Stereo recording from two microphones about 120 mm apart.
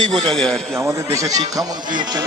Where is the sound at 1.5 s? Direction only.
35° right (ahead or behind).